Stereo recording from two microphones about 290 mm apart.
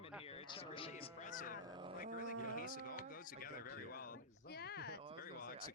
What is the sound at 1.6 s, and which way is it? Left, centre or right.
Speech, centre.